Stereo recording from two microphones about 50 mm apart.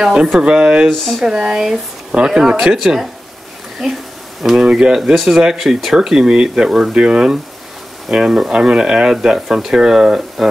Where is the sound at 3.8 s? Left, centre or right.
Centre.